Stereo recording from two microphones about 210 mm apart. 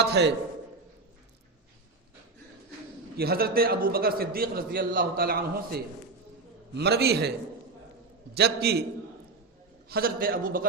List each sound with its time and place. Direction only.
0.0 s a man's voice: 50° right (ahead or behind)
3.2 s a man's voice: 45° right (ahead or behind)
8.4 s a man's voice: 50° right (ahead or behind)
9.9 s a man's voice: 45° right (ahead or behind)